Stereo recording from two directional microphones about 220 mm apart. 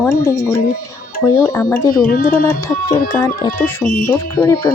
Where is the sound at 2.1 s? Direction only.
40° left (ahead or behind).